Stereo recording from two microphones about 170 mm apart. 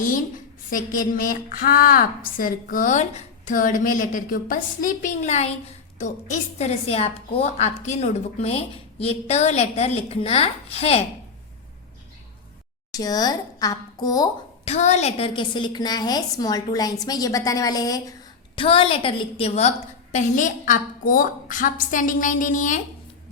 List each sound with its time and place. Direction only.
0.7 s a woman's voice: 55° left (ahead or behind); by 11.0 s 35° left (ahead or behind)
12.9 s speech: 20° left (ahead or behind)
14.6 s a woman's voice: 40° left (ahead or behind); by 18.1 s 20° left (ahead or behind)
18.5 s a woman's voice: 30° left (ahead or behind); by 22.8 s 50° left (ahead or behind)